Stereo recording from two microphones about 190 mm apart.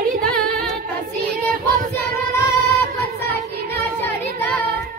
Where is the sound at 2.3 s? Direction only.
15° left (ahead or behind).